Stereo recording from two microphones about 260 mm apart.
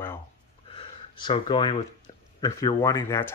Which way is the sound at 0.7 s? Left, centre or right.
Centre.